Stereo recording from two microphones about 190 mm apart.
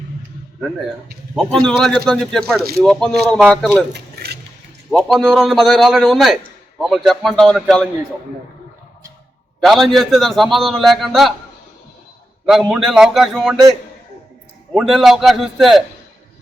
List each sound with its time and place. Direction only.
1.6 s a man's voice: 5° left (ahead or behind)
3.9 s keys jangling: 60° right (ahead or behind)
4.9 s a man's voice: centre (ahead or behind)
9.6 s a man's voice: centre (ahead or behind)
12.5 s a man's voice: centre (ahead or behind)